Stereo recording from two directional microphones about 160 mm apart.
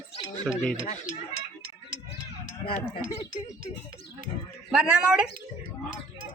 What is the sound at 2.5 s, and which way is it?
Speech, 65° left (ahead or behind).